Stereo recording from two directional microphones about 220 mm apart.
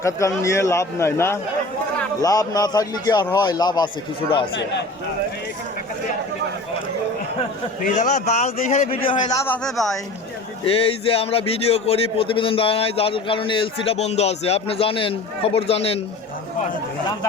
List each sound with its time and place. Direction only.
0.0 s a man's voice: 15° left (ahead or behind)
7.9 s a man's voice: 35° left (ahead or behind)
9.5 s speech: centre (ahead or behind)
10.7 s a man's voice: 25° left (ahead or behind)